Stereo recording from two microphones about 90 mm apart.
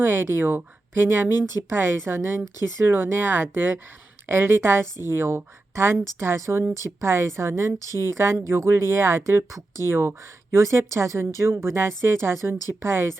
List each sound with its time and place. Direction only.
0.0 s a woman's voice: 25° right (ahead or behind)